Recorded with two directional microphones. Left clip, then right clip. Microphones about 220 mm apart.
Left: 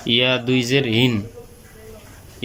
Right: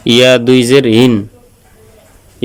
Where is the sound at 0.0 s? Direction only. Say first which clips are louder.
Right 11 dB; 45° right (ahead or behind).